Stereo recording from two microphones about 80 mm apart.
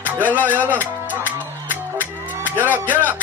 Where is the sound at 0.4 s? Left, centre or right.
Right.